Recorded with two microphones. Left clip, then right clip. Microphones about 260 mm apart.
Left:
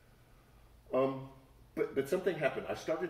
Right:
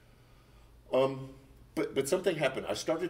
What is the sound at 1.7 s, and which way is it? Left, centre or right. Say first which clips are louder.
Speech: right 3 dB; right.